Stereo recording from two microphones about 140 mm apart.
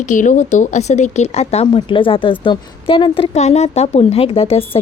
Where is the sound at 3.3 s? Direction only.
50° left (ahead or behind).